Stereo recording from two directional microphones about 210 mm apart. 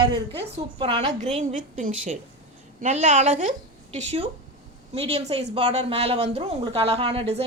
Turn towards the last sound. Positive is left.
turn(degrees=-30)  # may be behind; listen again after turning